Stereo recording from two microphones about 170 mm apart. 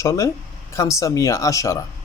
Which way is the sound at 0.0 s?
20° left (ahead or behind).